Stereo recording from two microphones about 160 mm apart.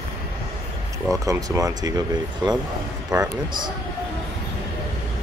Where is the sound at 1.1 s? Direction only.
20° right (ahead or behind).